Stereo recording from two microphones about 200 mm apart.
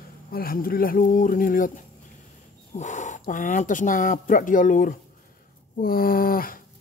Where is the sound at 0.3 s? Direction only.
45° left (ahead or behind).